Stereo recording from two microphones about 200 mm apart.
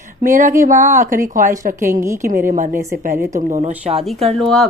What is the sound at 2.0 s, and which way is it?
Speech, 15° right (ahead or behind).